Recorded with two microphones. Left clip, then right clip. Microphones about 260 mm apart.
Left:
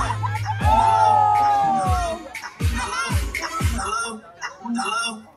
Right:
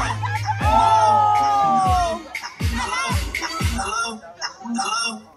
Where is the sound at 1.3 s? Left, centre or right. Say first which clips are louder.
Right 1 dB; right.